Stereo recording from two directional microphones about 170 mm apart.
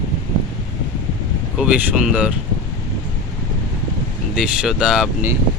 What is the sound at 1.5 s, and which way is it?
Speech, 5° right (ahead or behind).